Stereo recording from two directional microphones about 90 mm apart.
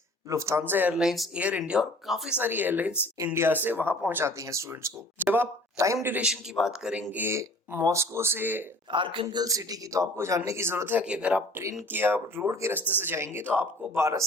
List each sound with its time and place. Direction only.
0.3 s speech: 35° right (ahead or behind)
0.9 s a man's voice: centre (ahead or behind)
1.4 s speech: 15° right (ahead or behind)
2.3 s speech: 20° right (ahead or behind)
5.2 s speech: 20° right (ahead or behind)
5.7 s speech: 35° right (ahead or behind)
6.2 s a man's voice: 5° right (ahead or behind)
7.1 s speech: 20° right (ahead or behind)
7.3 s speech: 35° right (ahead or behind)
8.9 s speech: 65° right (ahead or behind)
9.3 s speech: 45° right (ahead or behind); by 11.0 s 25° right (ahead or behind)
11.0 s speech: 15° right (ahead or behind); by 14.3 s 35° right (ahead or behind)